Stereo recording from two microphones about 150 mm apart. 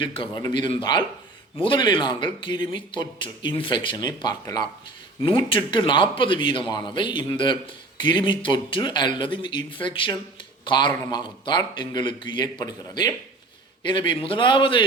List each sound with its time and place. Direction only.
0.0 s a man's voice: 35° left (ahead or behind)